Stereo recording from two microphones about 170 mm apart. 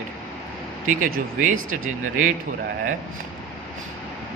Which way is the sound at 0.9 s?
50° right (ahead or behind).